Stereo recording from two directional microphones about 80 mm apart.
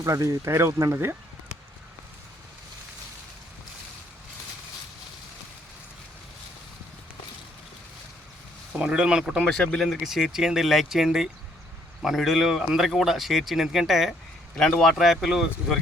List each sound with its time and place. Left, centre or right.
0.0 s speech: right
8.8 s speech: centre
9.4 s speech: centre
10.0 s speech: centre